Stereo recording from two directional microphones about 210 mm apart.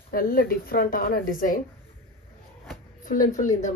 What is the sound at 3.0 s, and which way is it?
Speech, 40° left (ahead or behind).